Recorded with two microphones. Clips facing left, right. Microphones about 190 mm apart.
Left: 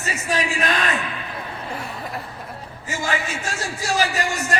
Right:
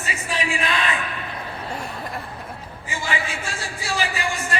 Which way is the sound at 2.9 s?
45° left (ahead or behind).